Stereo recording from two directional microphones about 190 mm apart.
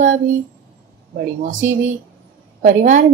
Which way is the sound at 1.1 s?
45° right (ahead or behind).